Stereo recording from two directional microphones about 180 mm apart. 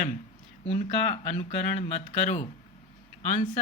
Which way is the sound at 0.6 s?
35° left (ahead or behind).